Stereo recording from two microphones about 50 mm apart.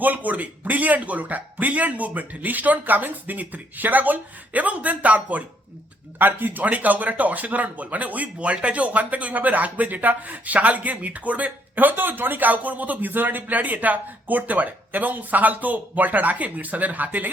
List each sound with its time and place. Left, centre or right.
0.0 s speech: right
6.1 s speech: right